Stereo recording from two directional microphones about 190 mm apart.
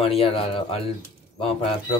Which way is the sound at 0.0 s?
30° left (ahead or behind).